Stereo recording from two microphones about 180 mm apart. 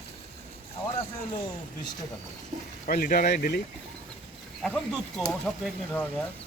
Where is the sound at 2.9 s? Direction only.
55° left (ahead or behind).